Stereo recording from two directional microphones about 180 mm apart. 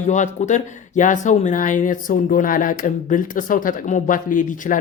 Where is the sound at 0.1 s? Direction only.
40° left (ahead or behind).